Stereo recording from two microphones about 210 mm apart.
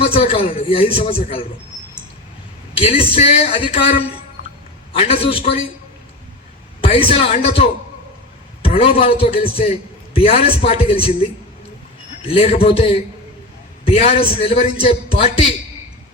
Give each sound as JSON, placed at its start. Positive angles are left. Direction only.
{"t": 0.0, "sound": "a man's voice", "side_deg": 25}
{"t": 2.7, "sound": "a man's voice", "side_deg": 25}
{"t": 6.8, "sound": "a man's voice", "side_deg": 25}